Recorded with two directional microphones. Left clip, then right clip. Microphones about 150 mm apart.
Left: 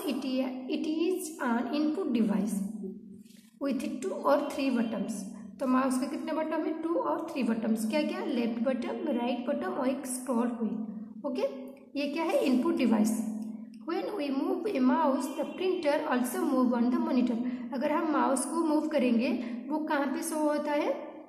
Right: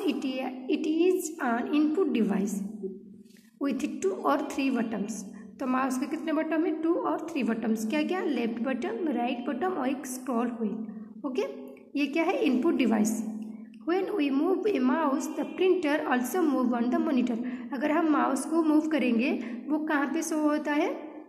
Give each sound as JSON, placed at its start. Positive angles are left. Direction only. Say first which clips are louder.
{"t": 0.0, "sound": "a sound", "louder": "right 2 dB", "side_deg": -40}
{"t": 3.6, "sound": "a woman's voice", "louder": "right 4 dB", "side_deg": -35}
{"t": 11.9, "sound": "a woman's voice", "louder": "right 2 dB", "side_deg": -35}